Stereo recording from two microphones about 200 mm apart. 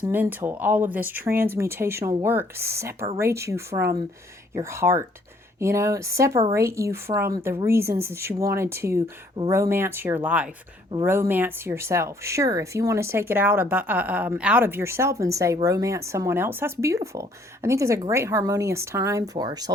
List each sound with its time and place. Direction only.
0.0 s speech: 10° right (ahead or behind)